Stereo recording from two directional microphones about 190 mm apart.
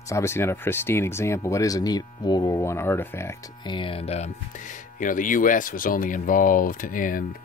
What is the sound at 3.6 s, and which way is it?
Speech, 25° left (ahead or behind).